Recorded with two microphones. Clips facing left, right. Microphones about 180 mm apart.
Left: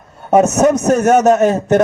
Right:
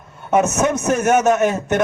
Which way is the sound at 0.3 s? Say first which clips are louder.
Left 6 dB; 40° left (ahead or behind).